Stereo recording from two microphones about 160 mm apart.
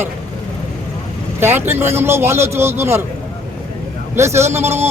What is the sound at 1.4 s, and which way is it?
A man's voice, 15° right (ahead or behind).